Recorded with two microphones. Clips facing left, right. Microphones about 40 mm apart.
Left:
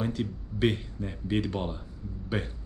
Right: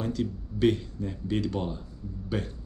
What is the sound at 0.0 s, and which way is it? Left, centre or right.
Speech, left.